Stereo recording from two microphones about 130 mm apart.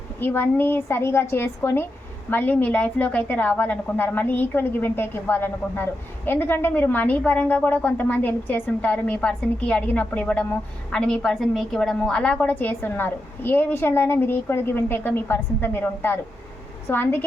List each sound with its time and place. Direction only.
0.2 s a woman's voice: 15° left (ahead or behind)